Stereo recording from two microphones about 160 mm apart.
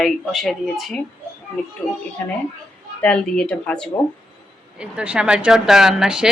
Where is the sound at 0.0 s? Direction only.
Centre (ahead or behind).